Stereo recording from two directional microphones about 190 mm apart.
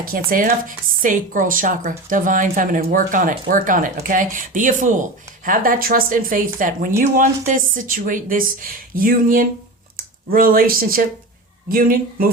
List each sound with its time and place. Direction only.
0.0 s a woman's voice: 50° right (ahead or behind)